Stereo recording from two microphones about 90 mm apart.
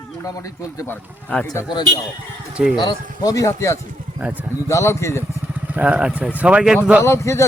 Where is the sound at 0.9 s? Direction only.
20° left (ahead or behind).